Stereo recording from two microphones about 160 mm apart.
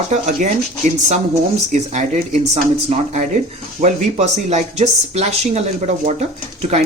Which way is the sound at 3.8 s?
45° right (ahead or behind).